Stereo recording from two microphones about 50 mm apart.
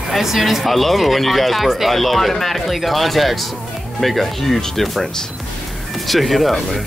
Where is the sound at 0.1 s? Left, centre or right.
Centre.